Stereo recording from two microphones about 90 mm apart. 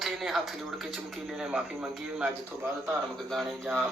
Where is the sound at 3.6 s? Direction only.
25° right (ahead or behind).